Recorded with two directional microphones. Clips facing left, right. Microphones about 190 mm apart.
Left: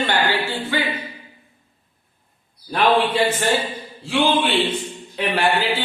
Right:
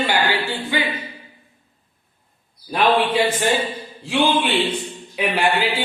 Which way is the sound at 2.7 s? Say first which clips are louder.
Even; 10° right (ahead or behind).